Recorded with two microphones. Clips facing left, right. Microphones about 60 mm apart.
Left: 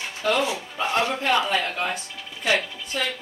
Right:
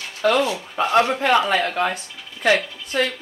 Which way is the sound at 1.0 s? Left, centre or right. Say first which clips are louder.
Right 4 dB; right.